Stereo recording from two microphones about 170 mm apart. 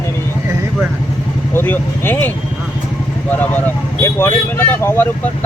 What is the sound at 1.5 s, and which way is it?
Speech, 10° left (ahead or behind).